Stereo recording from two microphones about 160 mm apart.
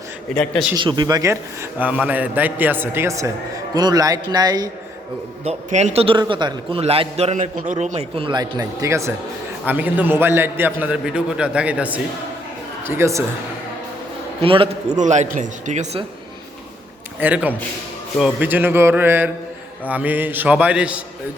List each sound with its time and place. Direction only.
0.3 s speech: 5° left (ahead or behind)
0.8 s speech: 30° right (ahead or behind)
1.8 s a man's voice: 10° right (ahead or behind)
5.5 s a man's voice: 40° right (ahead or behind); by 13.2 s 15° right (ahead or behind)
14.4 s a man's voice: 35° right (ahead or behind)
14.9 s speech: 50° right (ahead or behind)
17.2 s a man's voice: 10° right (ahead or behind)